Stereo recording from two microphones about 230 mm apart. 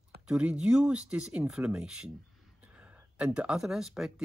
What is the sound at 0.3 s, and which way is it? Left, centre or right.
Speech, centre.